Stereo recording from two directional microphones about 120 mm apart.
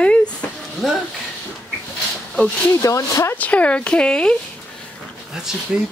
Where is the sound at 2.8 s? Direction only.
25° left (ahead or behind).